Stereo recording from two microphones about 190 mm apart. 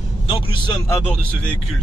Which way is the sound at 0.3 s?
25° left (ahead or behind).